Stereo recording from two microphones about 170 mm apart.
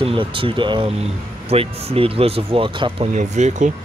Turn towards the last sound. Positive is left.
turn(degrees=-45)  # may be behind; listen again after turning